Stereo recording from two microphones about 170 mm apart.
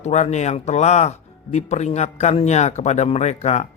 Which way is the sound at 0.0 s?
45° left (ahead or behind).